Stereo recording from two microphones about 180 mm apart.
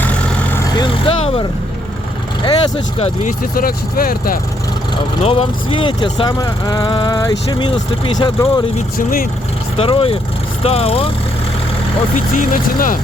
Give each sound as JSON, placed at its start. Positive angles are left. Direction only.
{"t": 0.8, "sound": "speech", "side_deg": 30}
{"t": 3.2, "sound": "speech", "side_deg": 50}
{"t": 5.2, "sound": "speech", "side_deg": 30}
{"t": 9.0, "sound": "speech", "side_deg": 50}
{"t": 9.7, "sound": "speech", "side_deg": 30}
{"t": 12.1, "sound": "speech", "side_deg": 45}